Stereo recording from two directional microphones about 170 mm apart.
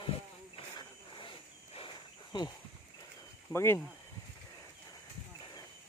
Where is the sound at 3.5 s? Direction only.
15° left (ahead or behind).